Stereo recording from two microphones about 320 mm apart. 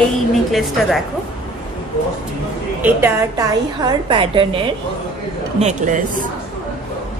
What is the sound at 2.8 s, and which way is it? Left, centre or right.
A woman's voice, centre.